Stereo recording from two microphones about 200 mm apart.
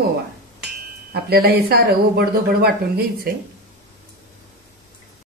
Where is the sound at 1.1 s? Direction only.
50° right (ahead or behind).